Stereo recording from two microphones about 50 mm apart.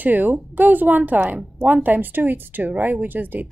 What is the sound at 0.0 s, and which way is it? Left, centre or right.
Speech, right.